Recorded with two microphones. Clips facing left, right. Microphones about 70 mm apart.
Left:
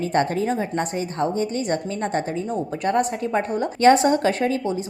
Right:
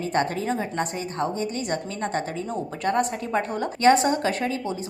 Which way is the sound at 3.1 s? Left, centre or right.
Left.